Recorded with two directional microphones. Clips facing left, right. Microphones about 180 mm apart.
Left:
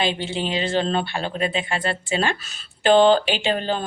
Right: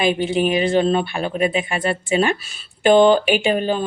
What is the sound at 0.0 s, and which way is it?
Speech, 15° right (ahead or behind).